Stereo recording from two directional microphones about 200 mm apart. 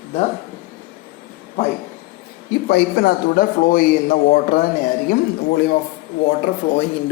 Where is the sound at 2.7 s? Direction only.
55° left (ahead or behind).